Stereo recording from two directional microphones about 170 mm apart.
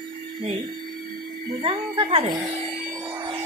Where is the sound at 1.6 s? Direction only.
30° right (ahead or behind).